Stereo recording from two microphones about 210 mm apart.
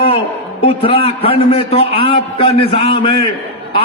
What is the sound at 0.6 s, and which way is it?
A man's voice, 25° left (ahead or behind).